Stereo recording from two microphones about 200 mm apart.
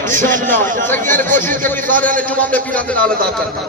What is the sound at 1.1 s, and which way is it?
Speech, 40° right (ahead or behind).